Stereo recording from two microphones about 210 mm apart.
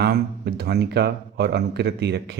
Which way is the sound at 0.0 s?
50° right (ahead or behind).